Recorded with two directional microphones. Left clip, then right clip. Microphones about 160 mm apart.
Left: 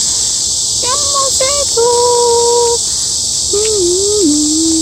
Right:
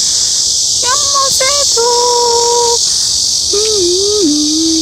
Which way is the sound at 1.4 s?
Centre (ahead or behind).